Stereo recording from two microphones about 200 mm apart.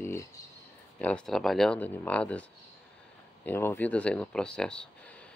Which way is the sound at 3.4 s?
10° left (ahead or behind).